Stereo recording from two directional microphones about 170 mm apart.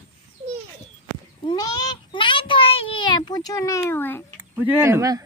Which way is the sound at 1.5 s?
25° left (ahead or behind).